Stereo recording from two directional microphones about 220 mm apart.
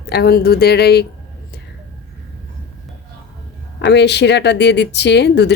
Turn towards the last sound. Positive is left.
turn(degrees=50)  # may be behind; listen again after turning